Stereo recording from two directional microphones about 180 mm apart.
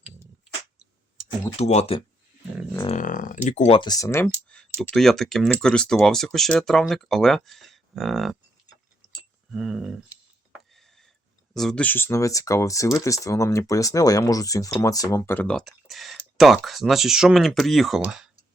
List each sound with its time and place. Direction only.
1.5 s speech: 35° left (ahead or behind); by 4.3 s 15° left (ahead or behind)
4.8 s speech: centre (ahead or behind)
10.7 s a sound: centre (ahead or behind)
11.5 s speech: 5° left (ahead or behind)